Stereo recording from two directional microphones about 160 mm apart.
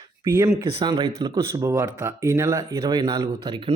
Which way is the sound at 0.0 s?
25° right (ahead or behind).